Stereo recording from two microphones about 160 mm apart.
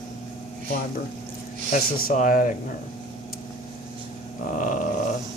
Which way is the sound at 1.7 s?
55° left (ahead or behind).